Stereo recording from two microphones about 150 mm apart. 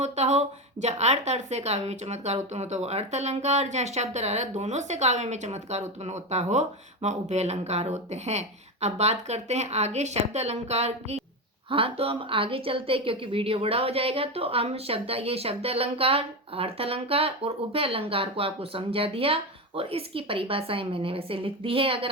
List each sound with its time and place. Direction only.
0.0 s a woman's voice: 50° right (ahead or behind)